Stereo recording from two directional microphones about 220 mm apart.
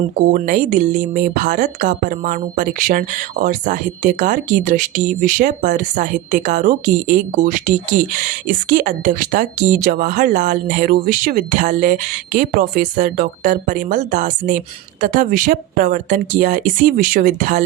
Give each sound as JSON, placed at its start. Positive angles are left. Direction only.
{"t": 0.2, "sound": "speech", "side_deg": -35}